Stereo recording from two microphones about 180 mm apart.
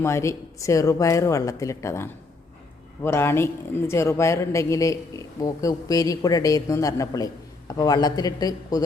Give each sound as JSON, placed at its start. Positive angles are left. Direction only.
{"t": 0.0, "sound": "a woman's voice", "side_deg": 15}